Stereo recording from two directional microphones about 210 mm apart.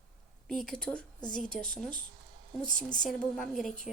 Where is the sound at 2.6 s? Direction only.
40° left (ahead or behind).